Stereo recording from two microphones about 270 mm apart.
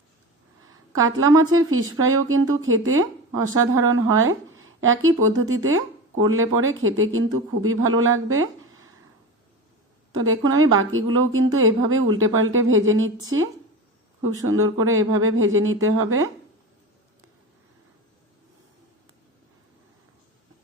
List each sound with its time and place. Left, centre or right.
0.9 s a woman's voice: right
10.1 s a woman's voice: right
14.4 s a woman's voice: right